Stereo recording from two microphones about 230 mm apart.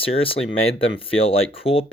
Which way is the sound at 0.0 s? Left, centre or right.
Left.